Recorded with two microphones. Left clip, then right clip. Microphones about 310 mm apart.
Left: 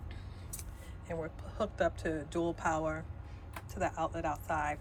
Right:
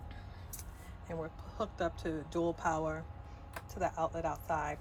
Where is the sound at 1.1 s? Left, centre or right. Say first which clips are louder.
Left 2 dB; centre.